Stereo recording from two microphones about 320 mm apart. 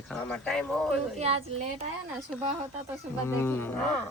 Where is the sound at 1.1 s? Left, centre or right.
Centre.